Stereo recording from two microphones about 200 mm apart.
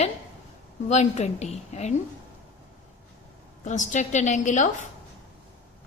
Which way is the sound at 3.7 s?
35° left (ahead or behind).